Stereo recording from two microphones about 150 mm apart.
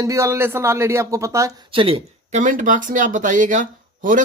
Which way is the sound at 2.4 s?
60° right (ahead or behind).